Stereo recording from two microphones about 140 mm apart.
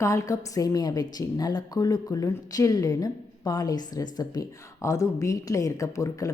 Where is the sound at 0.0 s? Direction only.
20° left (ahead or behind).